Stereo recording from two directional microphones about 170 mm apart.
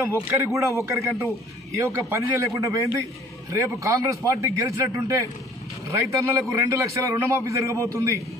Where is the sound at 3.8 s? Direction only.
20° right (ahead or behind).